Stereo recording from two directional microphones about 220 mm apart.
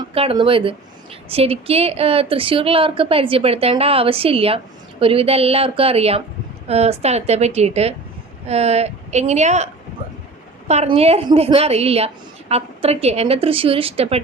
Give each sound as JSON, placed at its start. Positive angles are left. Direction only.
{"t": 0.1, "sound": "a woman's voice", "side_deg": -25}
{"t": 10.7, "sound": "a woman's voice", "side_deg": -30}